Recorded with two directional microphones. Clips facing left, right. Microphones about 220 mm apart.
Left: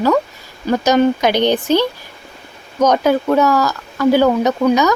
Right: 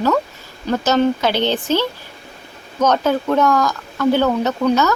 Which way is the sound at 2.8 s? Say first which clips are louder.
Left 3 dB; 10° left (ahead or behind).